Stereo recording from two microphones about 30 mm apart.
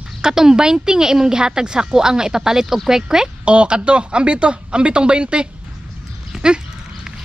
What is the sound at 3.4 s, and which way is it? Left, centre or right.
Speech, right.